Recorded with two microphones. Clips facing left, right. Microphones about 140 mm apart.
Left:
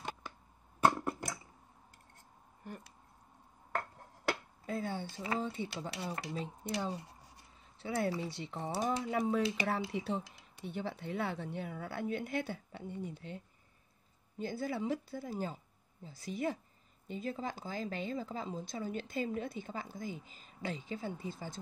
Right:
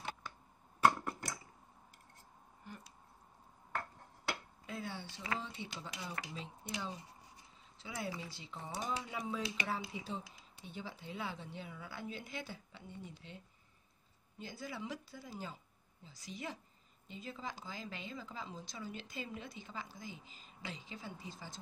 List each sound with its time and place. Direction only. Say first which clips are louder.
4.3 s a sound: left 7 dB; 50° left (ahead or behind)
5.4 s speech: left 8 dB; 45° left (ahead or behind)
7.8 s speech: left 8 dB; 60° left (ahead or behind)
8.8 s speech: left 8 dB; 50° left (ahead or behind)
9.7 s speech: left 6 dB; 65° left (ahead or behind)
14.4 s speech: left 9 dB; 55° left (ahead or behind)